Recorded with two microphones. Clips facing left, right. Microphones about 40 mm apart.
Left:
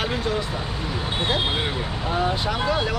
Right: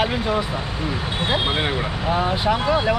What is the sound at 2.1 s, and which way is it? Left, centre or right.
Speech, centre.